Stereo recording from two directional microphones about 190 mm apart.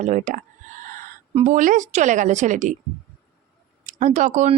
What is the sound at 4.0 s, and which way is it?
Speech, 40° right (ahead or behind).